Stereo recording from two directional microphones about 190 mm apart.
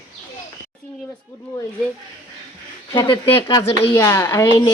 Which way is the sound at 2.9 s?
20° left (ahead or behind).